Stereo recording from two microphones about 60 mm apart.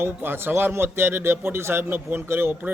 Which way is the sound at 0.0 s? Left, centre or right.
Right.